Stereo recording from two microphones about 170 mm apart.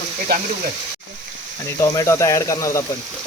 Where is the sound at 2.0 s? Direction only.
20° left (ahead or behind).